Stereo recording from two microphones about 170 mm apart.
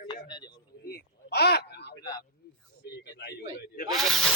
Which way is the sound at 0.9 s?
70° left (ahead or behind).